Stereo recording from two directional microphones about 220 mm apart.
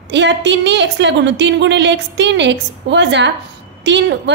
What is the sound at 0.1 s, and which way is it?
A woman's voice, 55° right (ahead or behind).